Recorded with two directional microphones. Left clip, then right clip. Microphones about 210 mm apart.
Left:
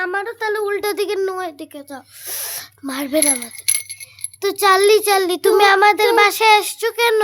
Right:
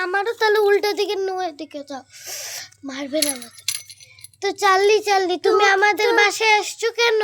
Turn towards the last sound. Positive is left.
turn(degrees=10)  # may be behind; listen again after turning